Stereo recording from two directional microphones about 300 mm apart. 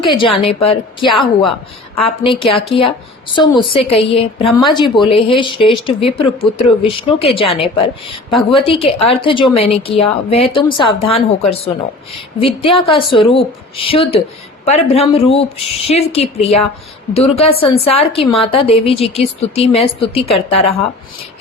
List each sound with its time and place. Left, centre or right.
0.0 s a woman's voice: centre